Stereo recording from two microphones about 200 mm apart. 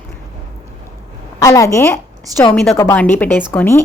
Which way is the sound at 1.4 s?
15° left (ahead or behind).